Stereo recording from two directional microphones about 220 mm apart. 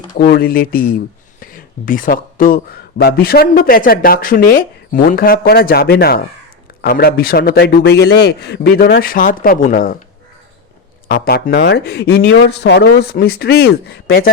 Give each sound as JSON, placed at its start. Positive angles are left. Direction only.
{"t": 0.2, "sound": "speech", "side_deg": 45}
{"t": 1.4, "sound": "a sound", "side_deg": 40}
{"t": 3.0, "sound": "a man's voice", "side_deg": 45}
{"t": 11.1, "sound": "a man's voice", "side_deg": 40}